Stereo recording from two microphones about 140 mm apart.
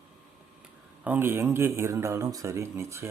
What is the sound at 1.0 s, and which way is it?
Speech, 15° right (ahead or behind).